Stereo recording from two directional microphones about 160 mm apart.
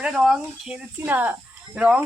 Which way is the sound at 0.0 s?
Centre (ahead or behind).